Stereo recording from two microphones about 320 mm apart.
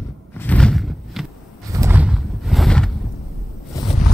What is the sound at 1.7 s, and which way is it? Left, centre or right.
Horse, centre.